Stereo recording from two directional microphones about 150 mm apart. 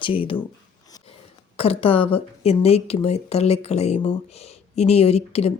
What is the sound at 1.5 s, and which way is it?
Speech, 40° left (ahead or behind).